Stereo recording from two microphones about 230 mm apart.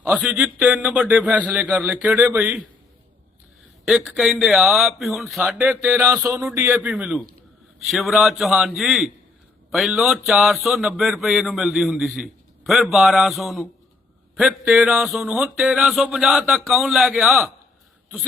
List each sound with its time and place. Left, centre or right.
0.0 s a man's voice: centre
3.8 s a man's voice: centre